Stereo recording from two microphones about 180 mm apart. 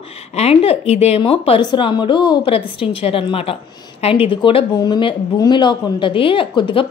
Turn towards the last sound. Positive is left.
turn(degrees=30)  # may be behind; listen again after turning